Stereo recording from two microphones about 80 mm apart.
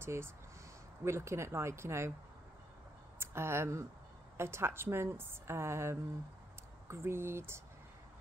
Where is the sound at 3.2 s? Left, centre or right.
Right.